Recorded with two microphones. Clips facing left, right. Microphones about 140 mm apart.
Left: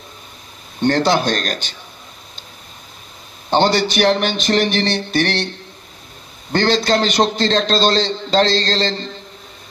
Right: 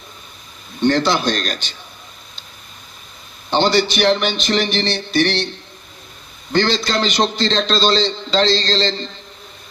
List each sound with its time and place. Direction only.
0.8 s a man's voice: 50° left (ahead or behind)
3.4 s a man's voice: 50° left (ahead or behind)
6.5 s a man's voice: 50° left (ahead or behind)